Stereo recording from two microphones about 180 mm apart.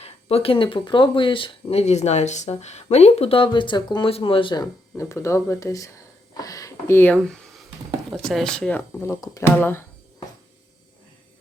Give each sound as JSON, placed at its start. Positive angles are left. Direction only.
{"t": 0.0, "sound": "speech", "side_deg": 35}